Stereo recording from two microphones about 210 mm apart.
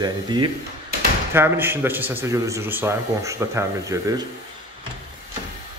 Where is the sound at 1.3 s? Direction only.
10° right (ahead or behind).